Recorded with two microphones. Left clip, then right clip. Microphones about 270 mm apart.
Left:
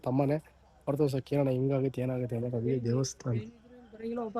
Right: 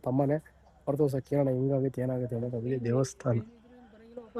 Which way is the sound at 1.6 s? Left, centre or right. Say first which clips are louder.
Right 1 dB; centre.